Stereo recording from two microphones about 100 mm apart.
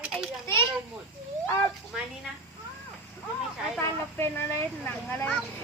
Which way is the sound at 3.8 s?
25° left (ahead or behind).